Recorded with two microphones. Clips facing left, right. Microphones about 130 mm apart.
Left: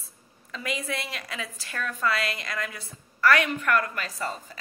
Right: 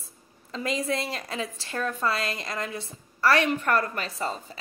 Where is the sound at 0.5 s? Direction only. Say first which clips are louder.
Right 4 dB; 30° right (ahead or behind).